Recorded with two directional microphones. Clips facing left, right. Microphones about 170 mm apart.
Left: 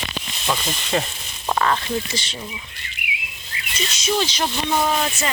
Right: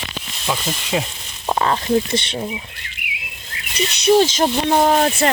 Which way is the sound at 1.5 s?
25° right (ahead or behind).